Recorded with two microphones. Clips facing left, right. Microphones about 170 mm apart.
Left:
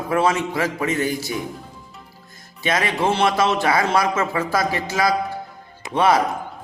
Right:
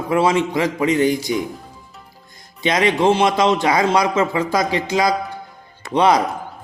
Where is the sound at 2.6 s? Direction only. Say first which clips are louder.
Right 5 dB; 20° right (ahead or behind).